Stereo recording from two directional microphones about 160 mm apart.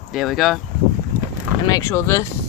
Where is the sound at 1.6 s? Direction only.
20° left (ahead or behind).